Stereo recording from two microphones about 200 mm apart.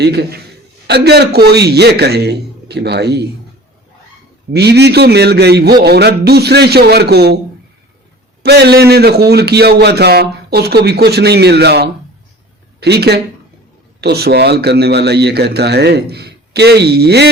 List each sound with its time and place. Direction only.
0.0 s speech: 55° right (ahead or behind)
4.5 s speech: 55° right (ahead or behind)
8.4 s a man's voice: 55° right (ahead or behind)